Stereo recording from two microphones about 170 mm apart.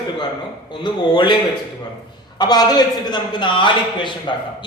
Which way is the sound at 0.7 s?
30° left (ahead or behind).